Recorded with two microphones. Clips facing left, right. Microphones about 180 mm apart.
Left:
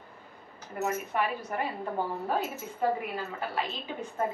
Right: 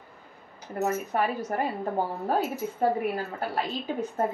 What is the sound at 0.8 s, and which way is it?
Speech, 40° right (ahead or behind).